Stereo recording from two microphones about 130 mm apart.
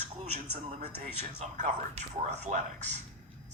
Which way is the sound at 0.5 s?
50° right (ahead or behind).